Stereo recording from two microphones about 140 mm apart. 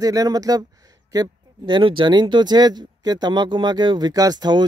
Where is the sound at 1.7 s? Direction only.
35° right (ahead or behind).